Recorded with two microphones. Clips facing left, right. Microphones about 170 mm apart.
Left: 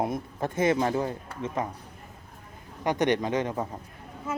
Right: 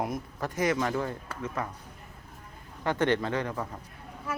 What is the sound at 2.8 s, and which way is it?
A man's voice, 15° left (ahead or behind).